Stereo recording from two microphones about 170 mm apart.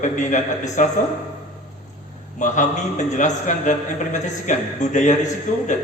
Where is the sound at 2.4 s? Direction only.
45° left (ahead or behind).